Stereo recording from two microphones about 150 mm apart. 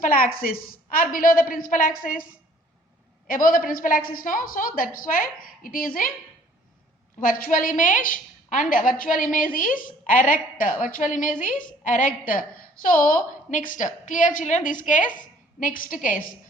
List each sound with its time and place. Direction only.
0.0 s a woman's voice: 70° left (ahead or behind)
3.2 s a woman's voice: 65° left (ahead or behind)
7.2 s a woman's voice: 70° left (ahead or behind)